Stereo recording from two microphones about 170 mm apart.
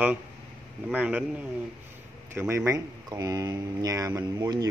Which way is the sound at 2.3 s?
15° right (ahead or behind).